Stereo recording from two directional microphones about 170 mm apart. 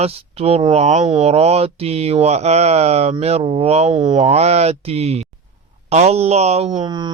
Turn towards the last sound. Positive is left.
turn(degrees=-25)  # may be behind; listen again after turning